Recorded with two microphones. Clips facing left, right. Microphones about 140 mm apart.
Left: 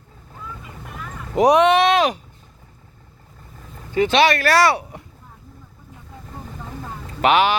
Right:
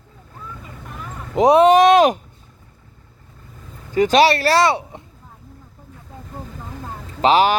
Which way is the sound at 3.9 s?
40° right (ahead or behind).